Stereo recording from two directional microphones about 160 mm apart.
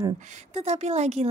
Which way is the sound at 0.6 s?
45° right (ahead or behind).